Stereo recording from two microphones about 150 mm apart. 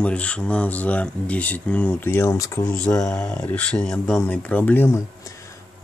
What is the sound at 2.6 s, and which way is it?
Speech, 10° left (ahead or behind).